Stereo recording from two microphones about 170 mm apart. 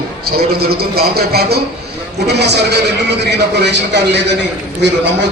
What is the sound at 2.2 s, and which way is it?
A man's voice, 80° right.